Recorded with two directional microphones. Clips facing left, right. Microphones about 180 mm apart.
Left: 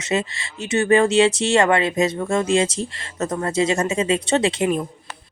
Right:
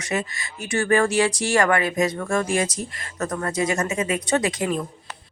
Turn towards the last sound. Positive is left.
turn(degrees=20)  # may be behind; listen again after turning